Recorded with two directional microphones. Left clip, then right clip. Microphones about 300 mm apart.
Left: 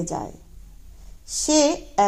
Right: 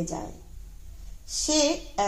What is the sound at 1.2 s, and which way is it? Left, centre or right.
Speech, left.